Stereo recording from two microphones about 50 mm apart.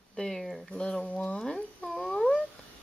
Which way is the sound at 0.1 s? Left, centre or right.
Centre.